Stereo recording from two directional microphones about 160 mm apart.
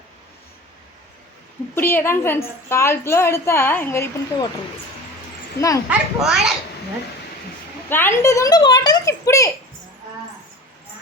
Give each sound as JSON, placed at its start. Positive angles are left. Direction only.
{"t": 1.7, "sound": "a woman's voice", "side_deg": 10}
{"t": 5.5, "sound": "a child's voice", "side_deg": 20}
{"t": 5.9, "sound": "a child's voice", "side_deg": -5}
{"t": 7.9, "sound": "a child's voice", "side_deg": 15}